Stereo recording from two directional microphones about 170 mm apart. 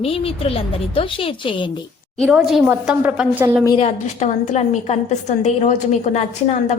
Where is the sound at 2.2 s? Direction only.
5° right (ahead or behind).